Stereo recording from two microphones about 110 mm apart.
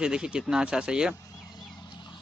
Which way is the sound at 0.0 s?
5° right (ahead or behind).